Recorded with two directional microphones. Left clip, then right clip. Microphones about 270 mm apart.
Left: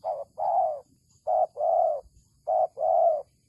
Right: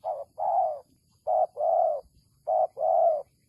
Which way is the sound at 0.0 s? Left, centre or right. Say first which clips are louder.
Left 1 dB; centre.